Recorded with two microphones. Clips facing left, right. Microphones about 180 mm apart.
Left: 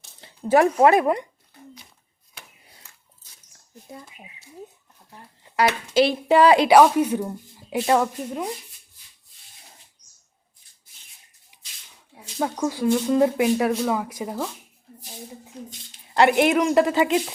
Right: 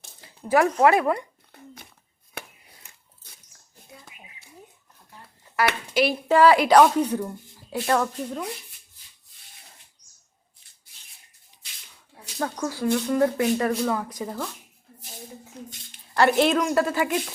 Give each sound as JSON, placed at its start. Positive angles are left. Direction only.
{"t": 0.2, "sound": "speech", "side_deg": 25}
{"t": 2.4, "sound": "a sound", "side_deg": -60}
{"t": 2.8, "sound": "biting", "side_deg": -15}
{"t": 5.5, "sound": "speech", "side_deg": 25}
{"t": 6.7, "sound": "speech", "side_deg": 5}
{"t": 11.5, "sound": "a sound", "side_deg": 10}
{"t": 12.4, "sound": "speech", "side_deg": 15}
{"t": 16.1, "sound": "speech", "side_deg": 15}